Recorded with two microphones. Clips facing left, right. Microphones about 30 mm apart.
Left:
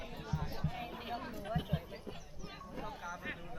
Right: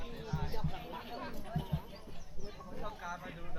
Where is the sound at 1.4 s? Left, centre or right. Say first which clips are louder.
Left 4 dB; left.